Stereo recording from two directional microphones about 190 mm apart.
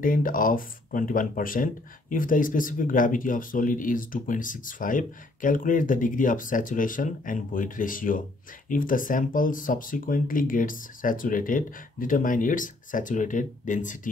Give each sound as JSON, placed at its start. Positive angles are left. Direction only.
{"t": 0.0, "sound": "speech", "side_deg": 45}